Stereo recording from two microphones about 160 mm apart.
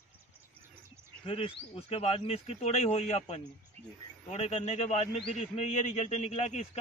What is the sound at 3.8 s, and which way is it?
Speech, 40° right (ahead or behind).